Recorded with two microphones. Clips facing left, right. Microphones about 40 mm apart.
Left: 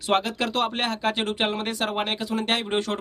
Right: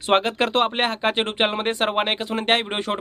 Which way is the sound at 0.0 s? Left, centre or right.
Right.